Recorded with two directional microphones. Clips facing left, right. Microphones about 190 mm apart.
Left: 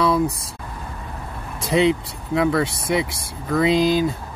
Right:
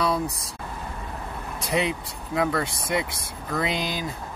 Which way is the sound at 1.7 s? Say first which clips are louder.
Left 8 dB; 25° left (ahead or behind).